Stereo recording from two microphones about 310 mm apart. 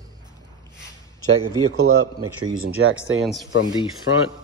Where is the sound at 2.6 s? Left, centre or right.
Right.